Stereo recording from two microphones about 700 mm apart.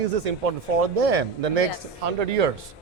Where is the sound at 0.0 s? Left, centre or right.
Right.